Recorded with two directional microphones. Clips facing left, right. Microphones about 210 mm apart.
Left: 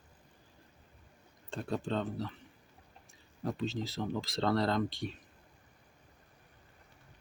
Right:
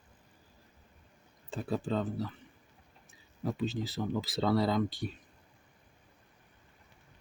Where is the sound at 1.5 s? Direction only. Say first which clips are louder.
Right 2 dB; 5° right (ahead or behind).